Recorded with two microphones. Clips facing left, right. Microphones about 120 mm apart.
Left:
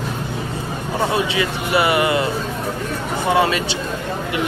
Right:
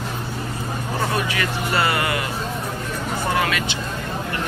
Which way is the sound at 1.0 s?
20° left (ahead or behind).